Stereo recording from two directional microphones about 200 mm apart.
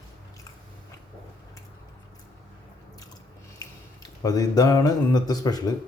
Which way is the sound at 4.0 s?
20° left (ahead or behind).